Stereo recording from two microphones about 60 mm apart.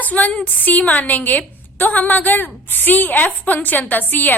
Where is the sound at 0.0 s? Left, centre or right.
Left.